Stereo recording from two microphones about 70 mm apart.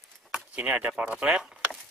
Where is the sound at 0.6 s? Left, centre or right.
Right.